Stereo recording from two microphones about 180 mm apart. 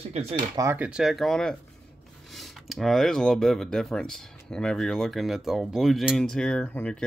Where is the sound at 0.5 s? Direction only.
15° right (ahead or behind).